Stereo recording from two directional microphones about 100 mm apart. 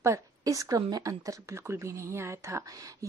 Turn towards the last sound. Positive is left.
turn(degrees=-30)  # may be behind; listen again after turning